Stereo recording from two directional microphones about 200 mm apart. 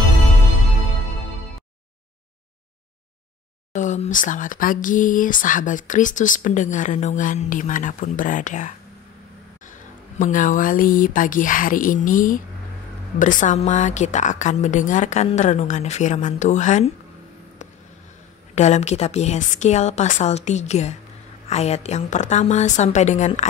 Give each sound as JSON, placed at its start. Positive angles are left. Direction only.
{"t": 3.7, "sound": "speech", "side_deg": 35}
{"t": 10.1, "sound": "speech", "side_deg": 40}
{"t": 18.5, "sound": "speech", "side_deg": 35}